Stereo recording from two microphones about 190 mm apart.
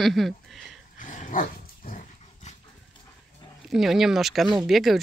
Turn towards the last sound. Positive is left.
turn(degrees=0)  # may be behind; listen again after turning